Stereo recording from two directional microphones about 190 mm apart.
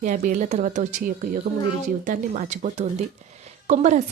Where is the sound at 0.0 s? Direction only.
40° right (ahead or behind).